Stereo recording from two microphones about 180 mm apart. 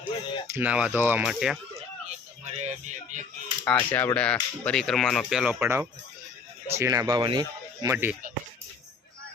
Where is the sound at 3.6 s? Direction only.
10° left (ahead or behind).